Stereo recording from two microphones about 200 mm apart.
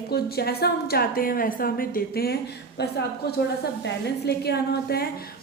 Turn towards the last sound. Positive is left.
turn(degrees=55)  # may be behind; listen again after turning